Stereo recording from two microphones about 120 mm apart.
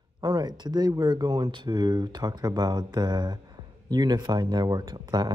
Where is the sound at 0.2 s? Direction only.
35° right (ahead or behind).